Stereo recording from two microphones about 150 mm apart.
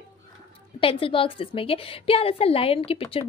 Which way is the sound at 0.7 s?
35° left (ahead or behind).